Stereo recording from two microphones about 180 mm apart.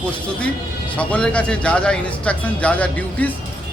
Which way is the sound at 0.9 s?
5° left (ahead or behind).